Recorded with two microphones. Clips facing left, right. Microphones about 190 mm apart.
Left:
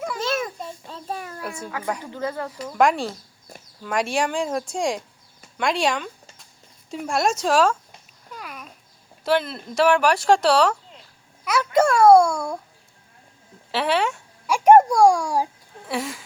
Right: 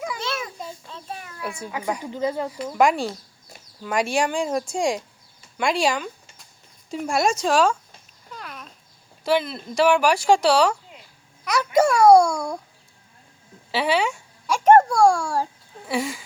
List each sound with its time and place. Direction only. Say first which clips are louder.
0.2 s a sound: left 4 dB; 45° left (ahead or behind)
2.0 s speech: right 3 dB; 15° right (ahead or behind)
2.7 s speech: even; centre (ahead or behind)
8.3 s babbling: left 1 dB; 10° left (ahead or behind)
9.2 s speech: even; centre (ahead or behind)
13.7 s a sound: even; centre (ahead or behind); by 15.4 s 15° left (ahead or behind)
15.9 s speech: right 2 dB; centre (ahead or behind)